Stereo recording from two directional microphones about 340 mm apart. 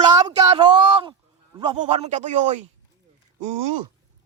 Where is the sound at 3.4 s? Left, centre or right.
Right.